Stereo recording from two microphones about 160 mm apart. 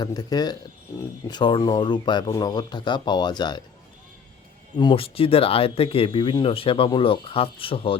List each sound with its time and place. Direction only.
0.0 s speech: 25° left (ahead or behind)
4.8 s speech: 30° left (ahead or behind)